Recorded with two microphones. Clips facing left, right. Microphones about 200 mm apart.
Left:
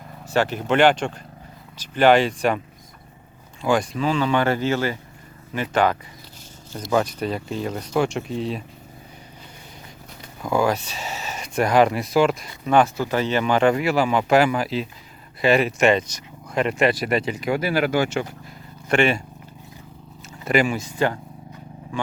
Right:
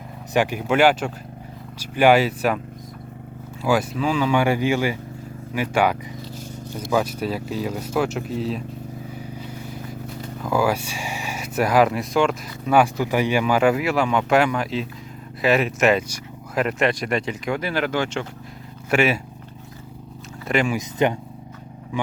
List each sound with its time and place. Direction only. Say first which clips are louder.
0.3 s speech: even; 10° right (ahead or behind)
3.6 s speech: even; 5° right (ahead or behind)
10.4 s speech: even; 5° right (ahead or behind)
12.8 s speech: right 1 dB; 15° right (ahead or behind); by 18.3 s 10° left (ahead or behind)
18.9 s speech: even; 5° right (ahead or behind)
20.4 s speech: left 2 dB; centre (ahead or behind)
20.7 s speech: right 2 dB; 20° right (ahead or behind)